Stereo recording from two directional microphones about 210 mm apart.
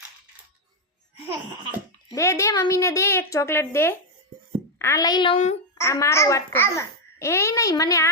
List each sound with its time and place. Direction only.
2.1 s a child's voice: 15° left (ahead or behind)
5.7 s a child's voice: 15° left (ahead or behind)